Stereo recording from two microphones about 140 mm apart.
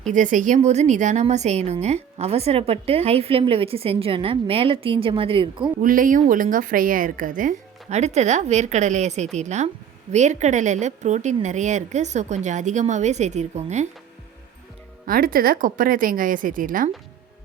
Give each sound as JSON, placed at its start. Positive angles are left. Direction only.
{"t": 0.1, "sound": "a woman's voice", "side_deg": -65}
{"t": 5.8, "sound": "a woman's voice", "side_deg": -75}
{"t": 15.0, "sound": "speech", "side_deg": -90}